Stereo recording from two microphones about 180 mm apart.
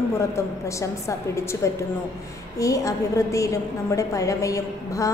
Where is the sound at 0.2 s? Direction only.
15° left (ahead or behind).